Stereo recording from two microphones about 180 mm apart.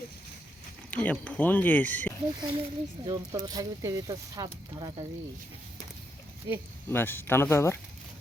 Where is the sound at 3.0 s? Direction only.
25° right (ahead or behind).